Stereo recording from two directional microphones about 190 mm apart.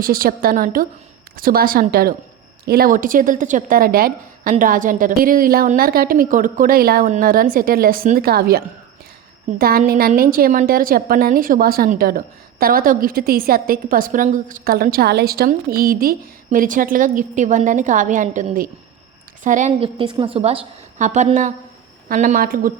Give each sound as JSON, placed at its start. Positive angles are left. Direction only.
{"t": 0.0, "sound": "a woman's voice", "side_deg": -50}